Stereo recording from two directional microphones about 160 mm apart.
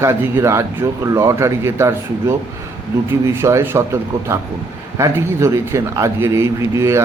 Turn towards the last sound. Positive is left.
turn(degrees=-15)  # may be behind; listen again after turning